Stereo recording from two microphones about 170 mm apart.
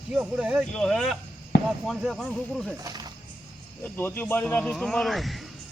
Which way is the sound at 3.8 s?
10° left (ahead or behind).